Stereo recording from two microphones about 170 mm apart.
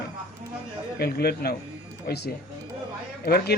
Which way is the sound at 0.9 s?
65° left (ahead or behind).